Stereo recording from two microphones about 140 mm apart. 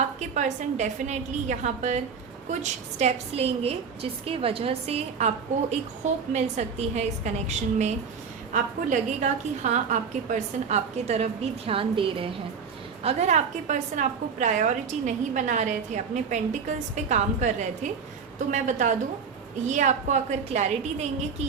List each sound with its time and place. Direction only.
0.2 s a woman's voice: 60° right (ahead or behind)
6.3 s a woman's voice: 55° right (ahead or behind)
13.0 s a woman's voice: 50° right (ahead or behind)